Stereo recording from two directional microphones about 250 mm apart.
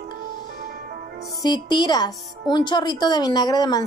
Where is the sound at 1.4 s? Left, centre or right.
Centre.